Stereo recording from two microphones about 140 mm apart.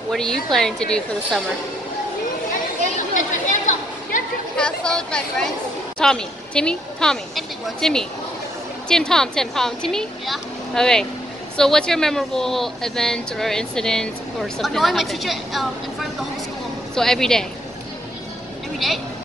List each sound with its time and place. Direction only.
0.1 s a woman's voice: 5° left (ahead or behind)
3.0 s chatter: 65° left (ahead or behind)
4.6 s a woman's voice: 5° left (ahead or behind)